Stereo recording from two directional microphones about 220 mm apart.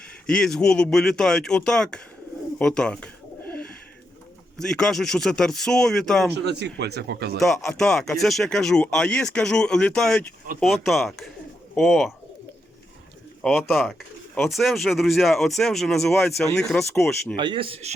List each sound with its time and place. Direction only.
0.3 s speech: centre (ahead or behind)
2.6 s bird: 5° left (ahead or behind)
4.5 s speech: centre (ahead or behind)
6.3 s speech: 50° right (ahead or behind)
7.3 s speech: centre (ahead or behind)
13.4 s speech: centre (ahead or behind)
17.3 s a man's voice: 20° right (ahead or behind)